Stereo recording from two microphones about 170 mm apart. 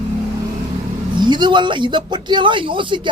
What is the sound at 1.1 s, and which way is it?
Speech, 25° right (ahead or behind).